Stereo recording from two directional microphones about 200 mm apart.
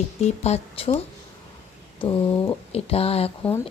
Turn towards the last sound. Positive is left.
turn(degrees=10)  # may be behind; listen again after turning